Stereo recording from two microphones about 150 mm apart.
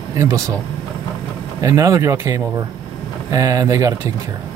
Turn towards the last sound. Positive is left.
turn(degrees=-20)  # may be behind; listen again after turning